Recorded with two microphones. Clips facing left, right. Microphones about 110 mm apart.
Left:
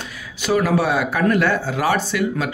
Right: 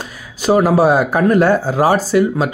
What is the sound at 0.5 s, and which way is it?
Speech, 35° right (ahead or behind).